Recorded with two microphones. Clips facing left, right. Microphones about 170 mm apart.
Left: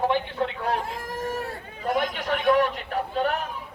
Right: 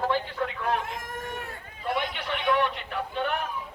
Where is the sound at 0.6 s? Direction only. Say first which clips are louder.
Left 2 dB; 35° left (ahead or behind).